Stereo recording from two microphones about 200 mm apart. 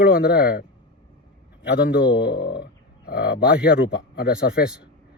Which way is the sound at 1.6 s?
55° left (ahead or behind).